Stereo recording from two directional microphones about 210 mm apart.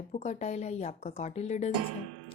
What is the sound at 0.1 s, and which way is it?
Speech, 35° left (ahead or behind).